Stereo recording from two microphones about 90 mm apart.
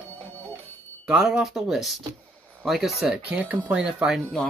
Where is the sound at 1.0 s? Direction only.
10° right (ahead or behind).